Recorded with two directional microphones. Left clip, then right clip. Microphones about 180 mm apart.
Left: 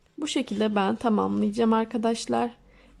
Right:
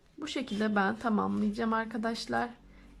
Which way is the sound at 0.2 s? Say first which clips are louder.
Left 7 dB; 15° left (ahead or behind).